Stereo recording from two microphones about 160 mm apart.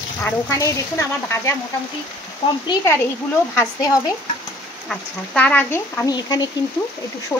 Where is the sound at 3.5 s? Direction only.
20° left (ahead or behind).